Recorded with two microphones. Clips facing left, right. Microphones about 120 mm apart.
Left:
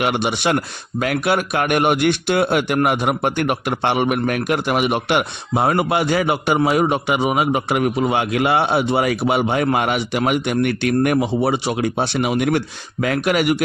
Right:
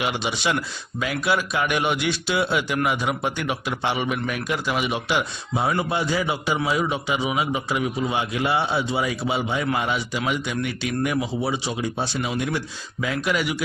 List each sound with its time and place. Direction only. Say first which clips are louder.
0.0 s a man's voice: left 6 dB; 55° left (ahead or behind)